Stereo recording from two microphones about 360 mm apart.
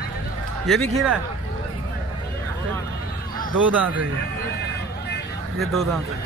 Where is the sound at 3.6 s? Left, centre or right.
Centre.